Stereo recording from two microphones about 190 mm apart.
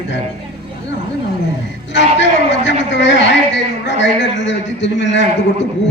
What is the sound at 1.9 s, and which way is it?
A woman's voice, 70° left (ahead or behind).